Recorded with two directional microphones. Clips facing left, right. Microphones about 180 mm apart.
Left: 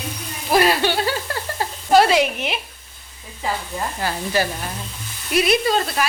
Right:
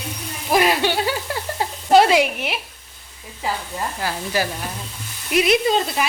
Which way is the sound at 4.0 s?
10° right (ahead or behind).